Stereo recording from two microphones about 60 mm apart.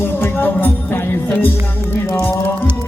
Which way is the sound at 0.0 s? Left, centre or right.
Left.